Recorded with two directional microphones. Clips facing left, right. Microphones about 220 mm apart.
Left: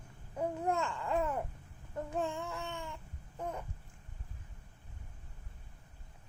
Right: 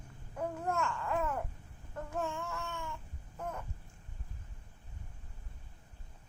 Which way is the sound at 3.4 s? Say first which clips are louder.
Left 1 dB; 15° left (ahead or behind).